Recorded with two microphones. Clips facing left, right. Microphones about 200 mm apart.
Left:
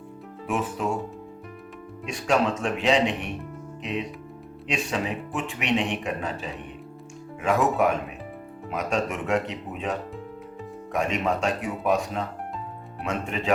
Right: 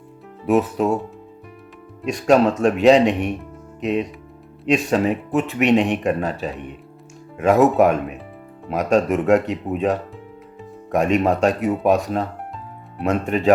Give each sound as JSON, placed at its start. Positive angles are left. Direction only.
{"t": 0.4, "sound": "speech", "side_deg": -40}
{"t": 2.0, "sound": "speech", "side_deg": -40}